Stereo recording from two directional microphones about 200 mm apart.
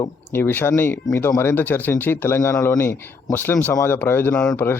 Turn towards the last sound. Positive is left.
turn(degrees=10)  # may be behind; listen again after turning